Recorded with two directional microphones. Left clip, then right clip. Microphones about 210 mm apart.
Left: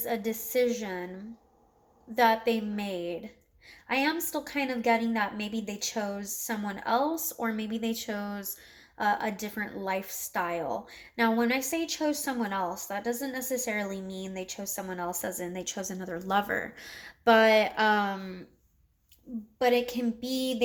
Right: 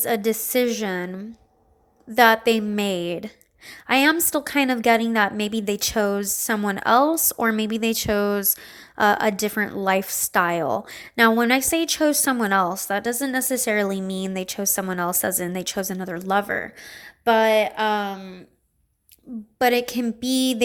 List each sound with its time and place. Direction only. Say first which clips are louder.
0.0 s a woman's voice: right 9 dB; 45° right (ahead or behind)
2.1 s a woman's voice: right 8 dB; 45° right (ahead or behind); by 18.4 s 5° right (ahead or behind)
19.5 s a woman's voice: right 6 dB; 40° right (ahead or behind)